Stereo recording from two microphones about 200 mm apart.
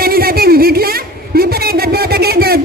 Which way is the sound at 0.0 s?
50° right (ahead or behind).